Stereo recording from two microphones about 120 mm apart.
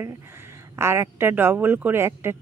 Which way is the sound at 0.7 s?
20° right (ahead or behind).